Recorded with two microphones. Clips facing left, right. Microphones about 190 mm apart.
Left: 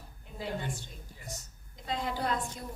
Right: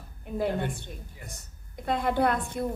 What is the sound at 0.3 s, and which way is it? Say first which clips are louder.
A woman's voice: right 8 dB; 55° right (ahead or behind).